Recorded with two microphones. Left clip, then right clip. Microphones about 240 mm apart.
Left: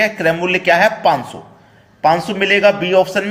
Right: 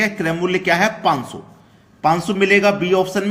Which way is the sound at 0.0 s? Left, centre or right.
Centre.